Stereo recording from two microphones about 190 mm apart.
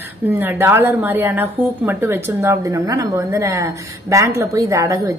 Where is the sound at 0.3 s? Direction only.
15° right (ahead or behind).